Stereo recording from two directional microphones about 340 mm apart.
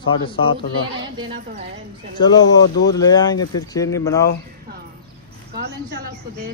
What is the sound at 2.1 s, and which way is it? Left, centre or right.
Speech, centre.